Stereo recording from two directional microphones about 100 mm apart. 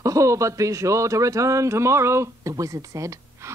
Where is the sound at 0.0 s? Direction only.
35° right (ahead or behind).